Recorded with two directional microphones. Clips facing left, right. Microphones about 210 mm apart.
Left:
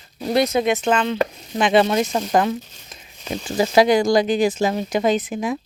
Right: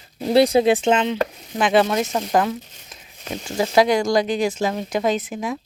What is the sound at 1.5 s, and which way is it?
Speech, centre (ahead or behind).